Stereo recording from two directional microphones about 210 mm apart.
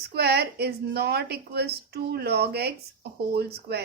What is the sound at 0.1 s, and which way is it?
A woman's voice, 50° right (ahead or behind).